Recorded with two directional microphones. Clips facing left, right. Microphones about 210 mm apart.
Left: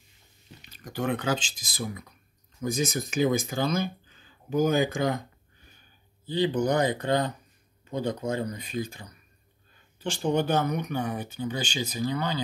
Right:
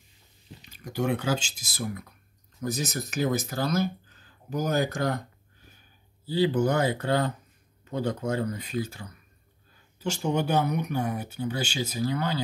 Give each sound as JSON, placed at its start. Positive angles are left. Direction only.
{"t": 0.7, "sound": "speech", "side_deg": -10}
{"t": 6.2, "sound": "speech", "side_deg": -5}
{"t": 6.6, "sound": "speech", "side_deg": 15}
{"t": 9.9, "sound": "speech", "side_deg": -10}